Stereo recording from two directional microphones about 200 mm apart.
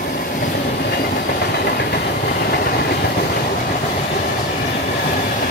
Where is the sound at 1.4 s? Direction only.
55° left (ahead or behind).